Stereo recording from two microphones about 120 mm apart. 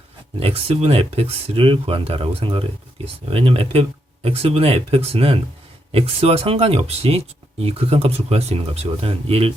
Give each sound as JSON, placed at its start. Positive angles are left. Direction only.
{"t": 0.3, "sound": "speech", "side_deg": -55}